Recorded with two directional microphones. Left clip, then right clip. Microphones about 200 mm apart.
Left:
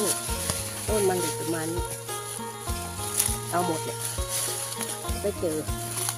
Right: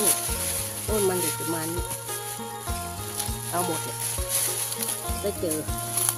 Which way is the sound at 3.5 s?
5° left (ahead or behind).